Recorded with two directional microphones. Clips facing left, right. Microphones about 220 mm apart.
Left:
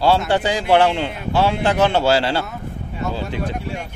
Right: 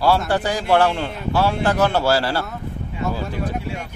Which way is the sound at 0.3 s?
25° left (ahead or behind).